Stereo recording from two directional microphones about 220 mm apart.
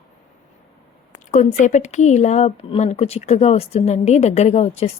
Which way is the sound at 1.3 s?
35° left (ahead or behind).